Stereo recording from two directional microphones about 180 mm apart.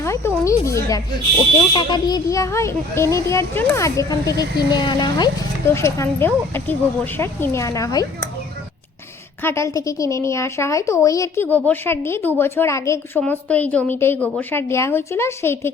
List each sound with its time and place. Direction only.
0.0 s a woman's voice: 15° left (ahead or behind)
9.4 s a woman's voice: 15° left (ahead or behind)